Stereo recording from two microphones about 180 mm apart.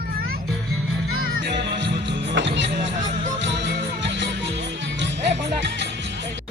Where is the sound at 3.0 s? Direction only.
40° right (ahead or behind).